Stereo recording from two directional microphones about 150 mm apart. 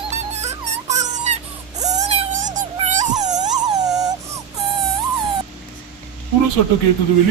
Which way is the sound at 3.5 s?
25° right (ahead or behind).